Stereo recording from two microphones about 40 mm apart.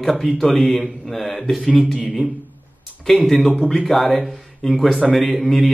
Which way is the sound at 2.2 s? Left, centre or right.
Right.